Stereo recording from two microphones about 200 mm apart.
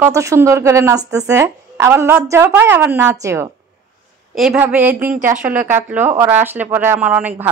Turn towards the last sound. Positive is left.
turn(degrees=-5)  # may be behind; listen again after turning